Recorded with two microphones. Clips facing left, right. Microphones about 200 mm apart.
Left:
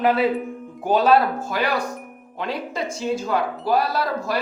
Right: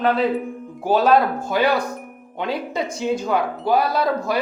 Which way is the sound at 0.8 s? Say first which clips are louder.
Right 1 dB; 5° right (ahead or behind).